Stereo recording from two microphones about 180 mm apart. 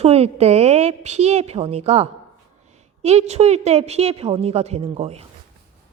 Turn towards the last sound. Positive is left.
turn(degrees=-35)  # may be behind; listen again after turning